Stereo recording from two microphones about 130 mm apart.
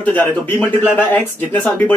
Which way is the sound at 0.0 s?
15° left (ahead or behind).